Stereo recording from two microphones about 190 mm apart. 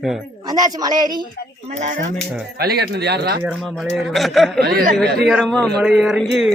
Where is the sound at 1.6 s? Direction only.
40° right (ahead or behind).